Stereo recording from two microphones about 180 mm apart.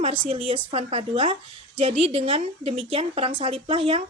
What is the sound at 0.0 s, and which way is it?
A woman's voice, 30° right (ahead or behind).